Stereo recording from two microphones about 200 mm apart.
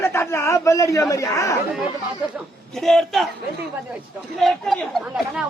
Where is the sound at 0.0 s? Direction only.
10° left (ahead or behind).